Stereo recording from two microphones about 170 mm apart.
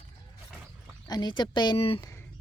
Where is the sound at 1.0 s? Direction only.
25° left (ahead or behind).